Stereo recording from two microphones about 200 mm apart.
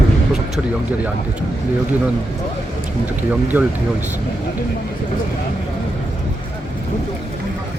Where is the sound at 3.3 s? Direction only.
10° right (ahead or behind).